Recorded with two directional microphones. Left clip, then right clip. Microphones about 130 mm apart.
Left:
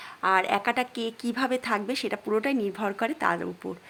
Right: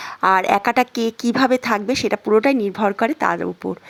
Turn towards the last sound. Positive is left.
turn(degrees=-40)  # may be behind; listen again after turning